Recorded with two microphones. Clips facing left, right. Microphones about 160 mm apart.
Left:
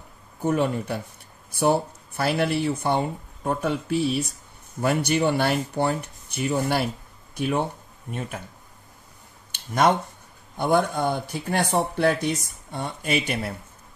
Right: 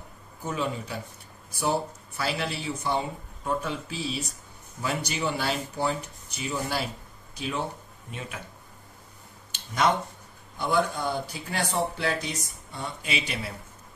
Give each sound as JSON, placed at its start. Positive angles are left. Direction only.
{"t": 0.5, "sound": "speech", "side_deg": 55}
{"t": 10.6, "sound": "speech", "side_deg": 55}